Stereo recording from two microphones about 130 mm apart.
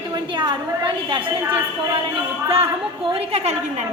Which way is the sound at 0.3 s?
40° right (ahead or behind).